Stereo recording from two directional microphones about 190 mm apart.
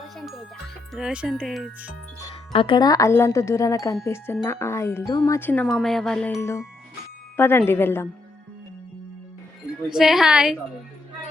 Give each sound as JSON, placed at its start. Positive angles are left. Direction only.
{"t": 0.2, "sound": "speech", "side_deg": 0}
{"t": 2.2, "sound": "speech", "side_deg": 25}
{"t": 6.4, "sound": "speech", "side_deg": 15}
{"t": 9.9, "sound": "speech", "side_deg": 0}